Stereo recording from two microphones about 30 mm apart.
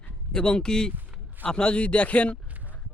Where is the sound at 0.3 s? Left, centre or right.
Left.